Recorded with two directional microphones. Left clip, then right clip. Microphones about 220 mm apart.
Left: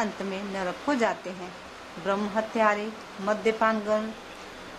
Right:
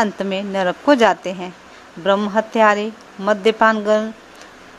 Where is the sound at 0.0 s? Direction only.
35° right (ahead or behind).